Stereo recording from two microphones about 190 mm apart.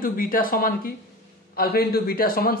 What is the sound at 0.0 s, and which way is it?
A man's voice, 50° left (ahead or behind).